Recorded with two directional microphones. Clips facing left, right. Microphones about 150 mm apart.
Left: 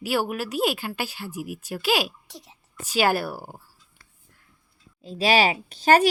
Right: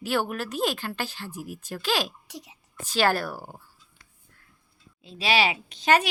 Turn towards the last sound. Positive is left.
turn(degrees=40)  # may be behind; listen again after turning